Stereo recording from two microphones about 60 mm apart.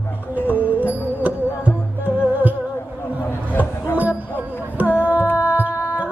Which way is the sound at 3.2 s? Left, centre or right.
Left.